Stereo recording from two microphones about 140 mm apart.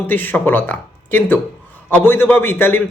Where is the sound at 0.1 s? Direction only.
15° left (ahead or behind).